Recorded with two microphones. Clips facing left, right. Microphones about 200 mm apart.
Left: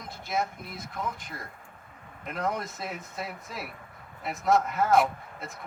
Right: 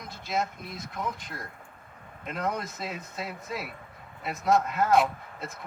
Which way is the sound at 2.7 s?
20° right (ahead or behind).